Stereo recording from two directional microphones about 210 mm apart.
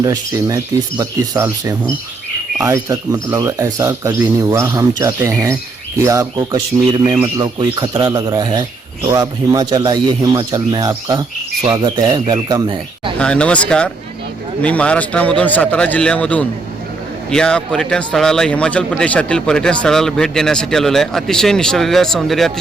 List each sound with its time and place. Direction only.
0.0 s speech: 15° right (ahead or behind)
13.1 s a man's voice: 5° left (ahead or behind)